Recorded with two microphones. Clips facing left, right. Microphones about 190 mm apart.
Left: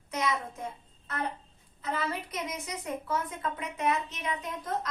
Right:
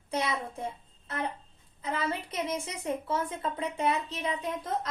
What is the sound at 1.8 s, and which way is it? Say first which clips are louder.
A woman's voice: right 1 dB; 25° right (ahead or behind).